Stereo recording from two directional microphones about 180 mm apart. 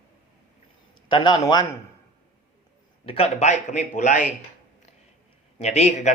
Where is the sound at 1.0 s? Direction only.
25° left (ahead or behind).